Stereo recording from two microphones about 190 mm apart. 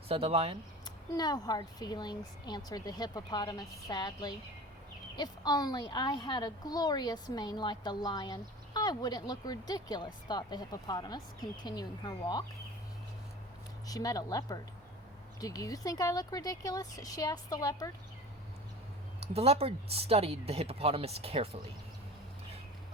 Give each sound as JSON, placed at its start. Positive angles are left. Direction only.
{"t": 0.1, "sound": "speech", "side_deg": -30}
{"t": 0.9, "sound": "a woman's voice", "side_deg": 20}
{"t": 13.8, "sound": "a woman's voice", "side_deg": 20}
{"t": 19.2, "sound": "speech", "side_deg": -30}